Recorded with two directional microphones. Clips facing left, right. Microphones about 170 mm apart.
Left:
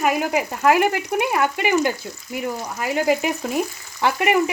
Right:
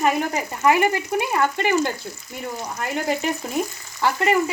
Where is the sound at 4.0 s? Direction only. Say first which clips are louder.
Left 1 dB; 15° left (ahead or behind).